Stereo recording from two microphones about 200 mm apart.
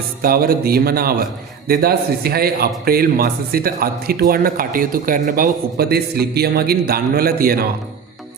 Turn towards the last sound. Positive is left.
turn(degrees=-50)  # may be behind; listen again after turning